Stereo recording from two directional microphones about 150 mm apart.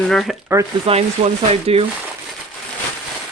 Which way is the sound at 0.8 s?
40° right (ahead or behind).